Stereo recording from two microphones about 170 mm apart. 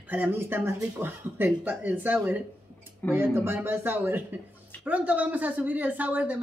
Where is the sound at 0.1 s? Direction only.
10° right (ahead or behind).